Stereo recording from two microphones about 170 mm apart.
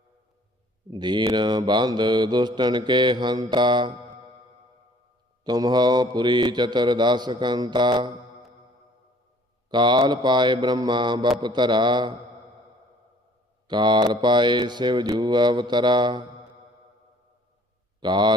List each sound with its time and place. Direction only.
0.9 s mantra: 25° right (ahead or behind)
5.4 s mantra: 25° right (ahead or behind)
9.6 s mantra: 25° right (ahead or behind)
13.7 s mantra: 25° right (ahead or behind)
18.0 s mantra: 25° right (ahead or behind)